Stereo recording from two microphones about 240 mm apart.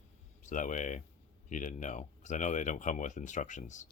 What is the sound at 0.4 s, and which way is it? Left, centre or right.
Speech, left.